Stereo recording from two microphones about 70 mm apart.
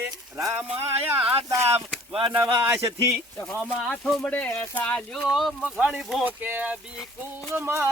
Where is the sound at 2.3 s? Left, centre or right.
Right.